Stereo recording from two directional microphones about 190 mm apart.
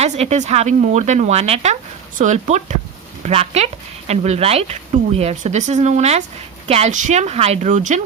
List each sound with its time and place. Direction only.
0.0 s speech: 35° right (ahead or behind)